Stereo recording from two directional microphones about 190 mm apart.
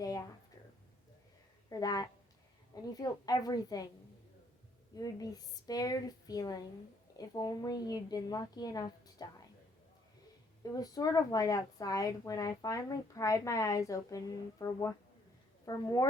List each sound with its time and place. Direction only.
0.0 s a sound: 20° left (ahead or behind)
1.7 s a woman's voice: 20° left (ahead or behind)
4.9 s a woman's voice: 20° left (ahead or behind)
10.6 s a woman's voice: 20° left (ahead or behind)